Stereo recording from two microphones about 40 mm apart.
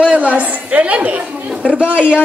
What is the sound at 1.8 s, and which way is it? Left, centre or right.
Speech, right.